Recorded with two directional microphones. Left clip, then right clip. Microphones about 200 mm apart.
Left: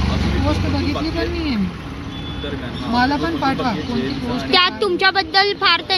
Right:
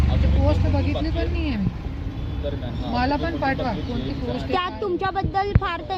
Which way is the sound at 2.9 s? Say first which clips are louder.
Left 5 dB; 5° right (ahead or behind).